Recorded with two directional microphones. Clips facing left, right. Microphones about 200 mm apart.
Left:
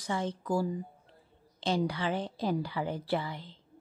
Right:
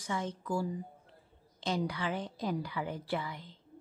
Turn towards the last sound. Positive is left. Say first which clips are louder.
# left 4 dB
turn(degrees=30)  # may be behind; listen again after turning